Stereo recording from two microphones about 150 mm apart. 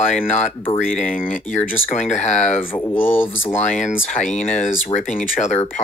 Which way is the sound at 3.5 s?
60° left (ahead or behind).